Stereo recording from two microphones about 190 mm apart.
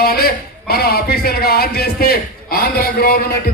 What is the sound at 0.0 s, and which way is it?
A man's voice, 55° left (ahead or behind).